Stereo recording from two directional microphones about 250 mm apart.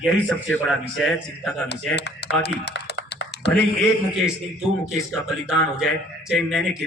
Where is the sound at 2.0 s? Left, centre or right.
Left.